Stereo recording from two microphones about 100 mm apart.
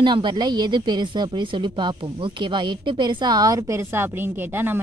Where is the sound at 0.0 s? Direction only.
50° right (ahead or behind).